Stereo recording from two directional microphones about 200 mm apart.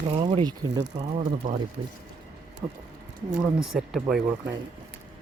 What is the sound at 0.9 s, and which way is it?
Speech, 35° right (ahead or behind).